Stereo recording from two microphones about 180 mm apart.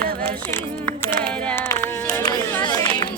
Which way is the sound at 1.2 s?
5° left (ahead or behind).